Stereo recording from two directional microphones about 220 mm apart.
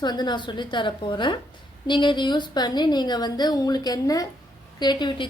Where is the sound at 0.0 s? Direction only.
20° left (ahead or behind).